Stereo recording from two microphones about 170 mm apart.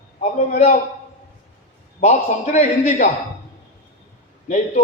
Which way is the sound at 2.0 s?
40° left (ahead or behind).